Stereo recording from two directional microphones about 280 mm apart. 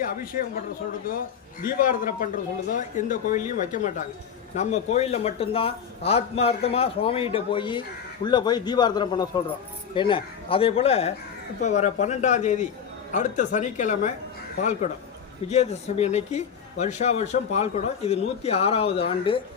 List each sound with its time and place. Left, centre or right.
0.0 s a man's voice: left
1.6 s a man's voice: left